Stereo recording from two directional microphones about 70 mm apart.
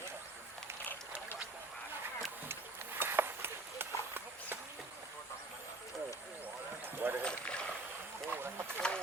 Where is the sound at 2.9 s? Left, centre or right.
Right.